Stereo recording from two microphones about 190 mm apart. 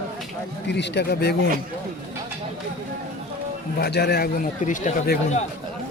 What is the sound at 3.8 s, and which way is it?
A man's voice, 60° left (ahead or behind).